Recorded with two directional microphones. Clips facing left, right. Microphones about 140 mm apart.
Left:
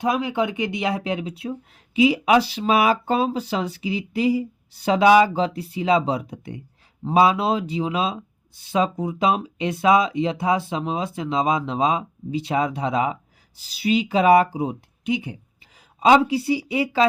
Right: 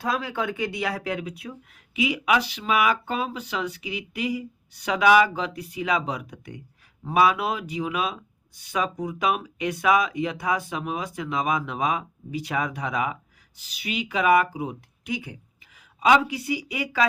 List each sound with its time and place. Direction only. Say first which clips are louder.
0.0 s speech: left 5 dB; 20° left (ahead or behind)